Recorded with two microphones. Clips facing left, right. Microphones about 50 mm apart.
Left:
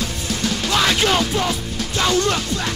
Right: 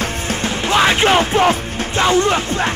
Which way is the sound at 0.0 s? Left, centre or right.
Right.